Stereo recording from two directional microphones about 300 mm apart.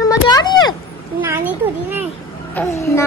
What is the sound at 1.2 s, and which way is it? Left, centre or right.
Speech, centre.